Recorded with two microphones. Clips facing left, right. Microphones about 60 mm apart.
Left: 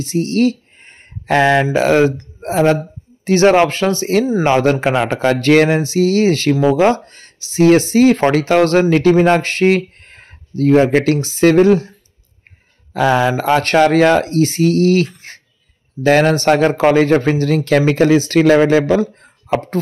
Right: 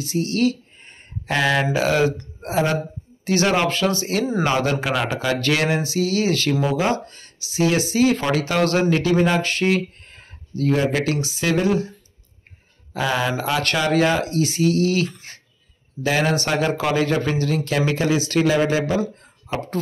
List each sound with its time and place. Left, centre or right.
0.0 s speech: left
6.5 s speech: centre
6.8 s speech: left
12.9 s speech: left
13.8 s speech: left
15.1 s a sound: left
16.0 s a man's voice: left